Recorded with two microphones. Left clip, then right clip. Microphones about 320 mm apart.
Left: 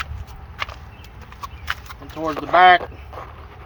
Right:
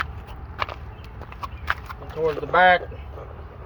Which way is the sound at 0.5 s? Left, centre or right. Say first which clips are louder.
Right 1 dB; right.